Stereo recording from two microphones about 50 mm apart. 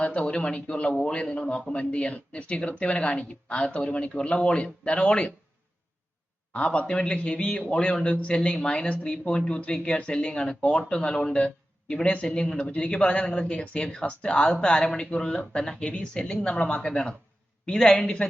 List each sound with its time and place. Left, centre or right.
0.0 s speech: left
6.5 s a man's voice: left